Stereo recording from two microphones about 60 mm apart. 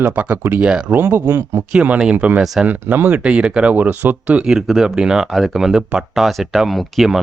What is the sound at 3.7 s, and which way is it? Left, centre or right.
Speech, right.